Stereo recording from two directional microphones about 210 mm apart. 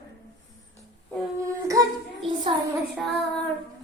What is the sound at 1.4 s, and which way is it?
Child singing, 15° right (ahead or behind).